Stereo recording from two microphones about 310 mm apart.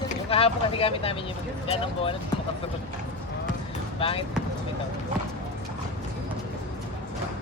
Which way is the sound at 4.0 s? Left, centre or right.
Centre.